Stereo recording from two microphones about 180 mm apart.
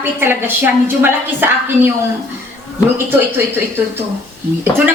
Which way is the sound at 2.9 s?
10° right (ahead or behind).